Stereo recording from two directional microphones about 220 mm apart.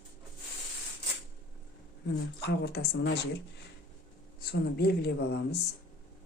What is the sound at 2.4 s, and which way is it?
Speech, 50° left (ahead or behind).